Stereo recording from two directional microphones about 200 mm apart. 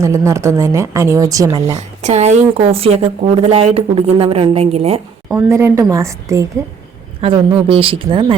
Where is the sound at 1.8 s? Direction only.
35° right (ahead or behind).